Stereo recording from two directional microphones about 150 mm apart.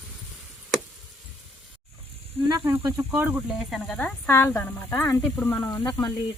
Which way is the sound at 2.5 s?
20° right (ahead or behind).